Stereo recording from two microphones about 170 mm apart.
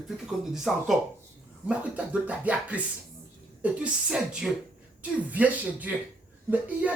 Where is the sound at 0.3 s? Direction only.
Centre (ahead or behind).